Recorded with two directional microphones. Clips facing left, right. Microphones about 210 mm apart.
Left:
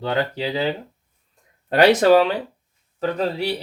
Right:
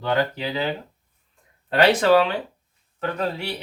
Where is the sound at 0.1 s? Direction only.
30° left (ahead or behind).